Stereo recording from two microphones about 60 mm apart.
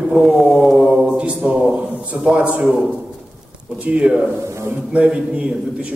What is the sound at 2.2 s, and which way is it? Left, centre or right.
Speech, right.